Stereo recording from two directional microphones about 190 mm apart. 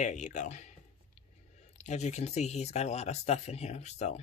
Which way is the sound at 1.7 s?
35° left (ahead or behind).